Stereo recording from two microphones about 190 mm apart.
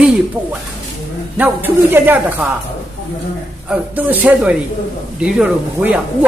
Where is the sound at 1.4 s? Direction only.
10° right (ahead or behind).